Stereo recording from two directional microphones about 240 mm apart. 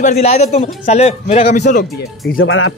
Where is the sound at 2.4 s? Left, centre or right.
Left.